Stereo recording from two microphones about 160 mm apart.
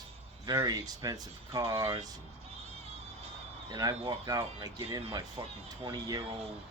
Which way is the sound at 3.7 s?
25° right (ahead or behind).